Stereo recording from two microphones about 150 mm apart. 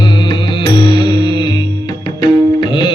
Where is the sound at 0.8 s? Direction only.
35° left (ahead or behind).